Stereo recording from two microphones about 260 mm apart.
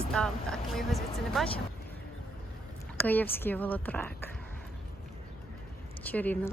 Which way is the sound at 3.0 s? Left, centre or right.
Centre.